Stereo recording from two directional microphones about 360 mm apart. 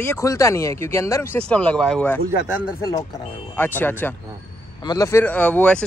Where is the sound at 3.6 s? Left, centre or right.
Centre.